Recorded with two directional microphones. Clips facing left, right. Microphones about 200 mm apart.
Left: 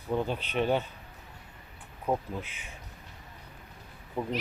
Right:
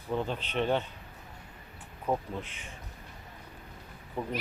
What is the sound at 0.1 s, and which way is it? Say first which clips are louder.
Speech: left 2 dB; 10° left (ahead or behind).